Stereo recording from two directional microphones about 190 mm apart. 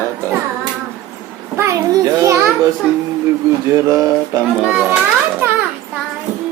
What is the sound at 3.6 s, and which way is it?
Speech, 15° right (ahead or behind).